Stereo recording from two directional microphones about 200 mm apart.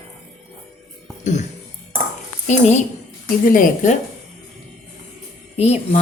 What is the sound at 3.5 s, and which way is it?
Speech, 40° left (ahead or behind).